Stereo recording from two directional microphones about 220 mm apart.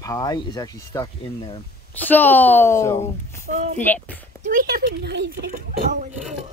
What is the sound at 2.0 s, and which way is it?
Speech, 10° left (ahead or behind).